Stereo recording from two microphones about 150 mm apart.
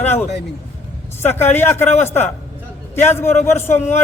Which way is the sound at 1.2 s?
15° left (ahead or behind).